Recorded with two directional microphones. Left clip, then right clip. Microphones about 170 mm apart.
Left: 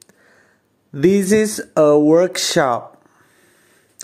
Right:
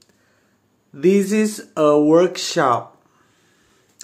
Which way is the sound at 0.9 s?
50° left (ahead or behind).